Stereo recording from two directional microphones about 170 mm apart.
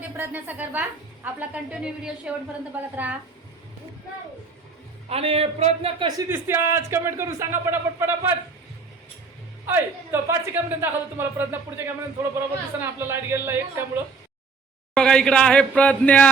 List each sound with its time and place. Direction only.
0.2 s speech: 10° right (ahead or behind)
5.0 s a man's voice: 35° right (ahead or behind)
6.1 s speech: 15° right (ahead or behind)
9.6 s speech: 15° right (ahead or behind)
14.9 s speech: 5° left (ahead or behind)